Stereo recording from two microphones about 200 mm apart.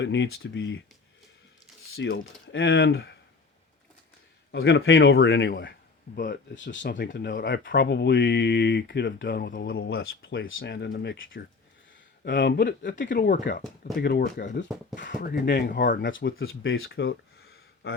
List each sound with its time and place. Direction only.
0.0 s speech: 60° left (ahead or behind)
2.0 s speech: 65° left (ahead or behind)
2.9 s speech: 55° left (ahead or behind)
4.5 s speech: 75° left (ahead or behind); by 10.0 s 55° left (ahead or behind)
10.0 s speech: 75° left (ahead or behind)
10.6 s speech: 60° left (ahead or behind)
13.1 s speech: 40° left (ahead or behind)
16.0 s speech: 70° left (ahead or behind); by 16.9 s 85° left
17.4 s a sound: 55° left (ahead or behind)